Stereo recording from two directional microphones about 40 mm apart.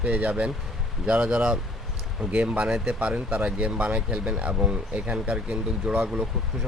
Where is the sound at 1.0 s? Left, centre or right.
Right.